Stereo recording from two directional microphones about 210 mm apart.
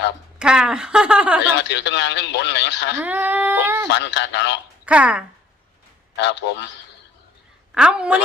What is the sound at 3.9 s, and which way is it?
Speech, 55° left (ahead or behind).